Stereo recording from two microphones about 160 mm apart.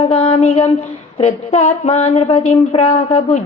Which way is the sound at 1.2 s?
40° left (ahead or behind).